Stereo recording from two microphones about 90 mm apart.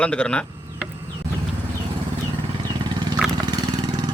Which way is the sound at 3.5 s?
50° right (ahead or behind).